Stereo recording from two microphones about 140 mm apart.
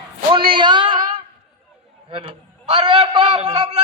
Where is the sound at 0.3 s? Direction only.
35° right (ahead or behind).